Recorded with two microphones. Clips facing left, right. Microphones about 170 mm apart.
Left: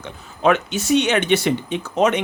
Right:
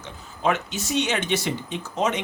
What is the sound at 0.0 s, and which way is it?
Speech, 70° left (ahead or behind).